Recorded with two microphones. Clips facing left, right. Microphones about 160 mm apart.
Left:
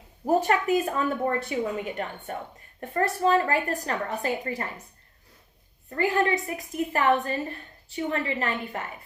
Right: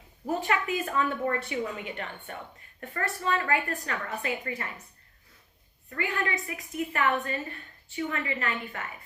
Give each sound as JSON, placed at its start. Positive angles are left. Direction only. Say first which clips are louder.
{"t": 0.3, "sound": "a woman's voice", "louder": "left 6 dB", "side_deg": 40}
{"t": 5.9, "sound": "a woman's voice", "louder": "left 7 dB", "side_deg": 35}